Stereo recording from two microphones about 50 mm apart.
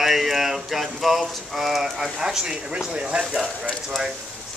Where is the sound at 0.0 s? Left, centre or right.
Centre.